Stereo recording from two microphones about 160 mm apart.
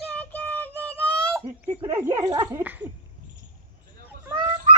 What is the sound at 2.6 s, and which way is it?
Speech, 10° right (ahead or behind).